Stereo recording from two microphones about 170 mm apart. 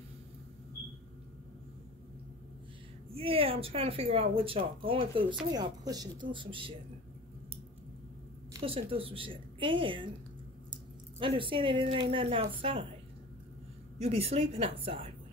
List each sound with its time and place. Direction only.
3.1 s a woman's voice: 35° right (ahead or behind)
8.6 s speech: 35° right (ahead or behind)
13.9 s speech: 35° right (ahead or behind)